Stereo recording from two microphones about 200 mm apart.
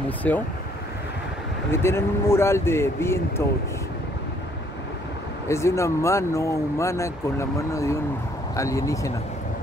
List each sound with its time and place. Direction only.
0.2 s speech: 5° left (ahead or behind)
1.7 s speech: 15° left (ahead or behind)
5.5 s speech: 15° left (ahead or behind)